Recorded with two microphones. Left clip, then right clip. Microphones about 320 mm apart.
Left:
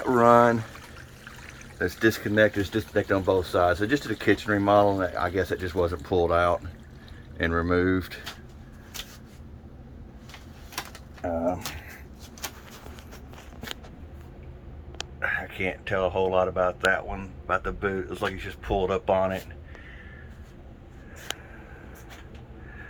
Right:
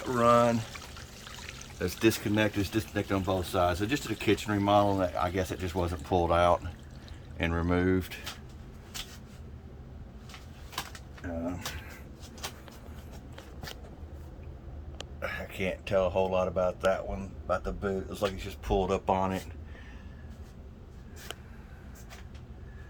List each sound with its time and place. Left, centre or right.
0.1 s speech: centre
1.8 s speech: centre
12.4 s a sound: left
15.2 s speech: centre